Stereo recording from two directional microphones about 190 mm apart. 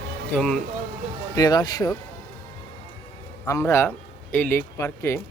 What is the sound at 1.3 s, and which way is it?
Speech, 20° left (ahead or behind).